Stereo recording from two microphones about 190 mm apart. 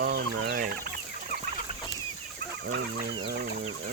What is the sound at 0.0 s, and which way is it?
Fowl, 55° right (ahead or behind).